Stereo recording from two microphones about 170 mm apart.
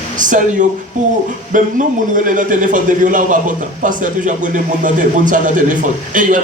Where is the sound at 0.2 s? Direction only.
50° right (ahead or behind).